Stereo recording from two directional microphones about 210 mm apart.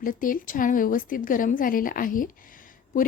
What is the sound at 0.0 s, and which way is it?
A woman's voice, 40° left (ahead or behind).